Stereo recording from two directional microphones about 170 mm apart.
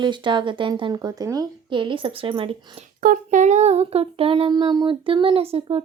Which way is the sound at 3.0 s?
50° right (ahead or behind).